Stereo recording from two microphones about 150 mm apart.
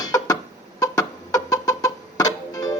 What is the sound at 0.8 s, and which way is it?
Music, 25° left (ahead or behind).